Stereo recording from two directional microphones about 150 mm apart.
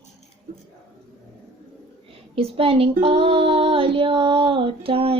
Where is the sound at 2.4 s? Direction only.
40° right (ahead or behind).